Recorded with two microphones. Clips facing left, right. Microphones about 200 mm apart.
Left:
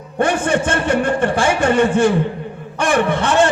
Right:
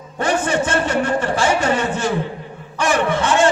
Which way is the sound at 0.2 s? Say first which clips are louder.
Left 2 dB; 55° left (ahead or behind).